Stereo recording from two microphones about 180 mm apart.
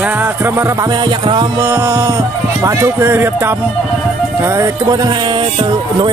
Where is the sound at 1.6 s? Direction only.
15° right (ahead or behind).